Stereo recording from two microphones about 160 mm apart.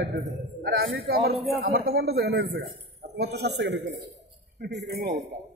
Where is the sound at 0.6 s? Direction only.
70° right (ahead or behind).